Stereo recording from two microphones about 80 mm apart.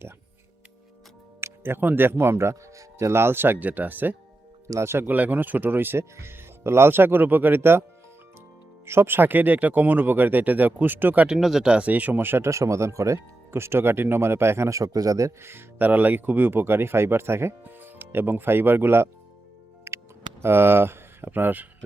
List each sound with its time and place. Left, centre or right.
1.4 s speech: right
4.7 s speech: right
8.9 s speech: right
11.3 s speech: centre; by 12.5 s right
12.5 s speech: right
15.4 s speech: right
19.9 s music: right
20.4 s speech: right